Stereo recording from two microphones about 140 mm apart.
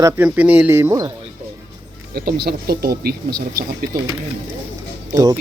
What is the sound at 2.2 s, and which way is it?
Speech, 90° right.